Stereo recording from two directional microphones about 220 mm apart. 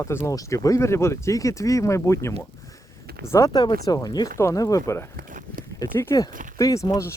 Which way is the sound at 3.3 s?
15° left (ahead or behind).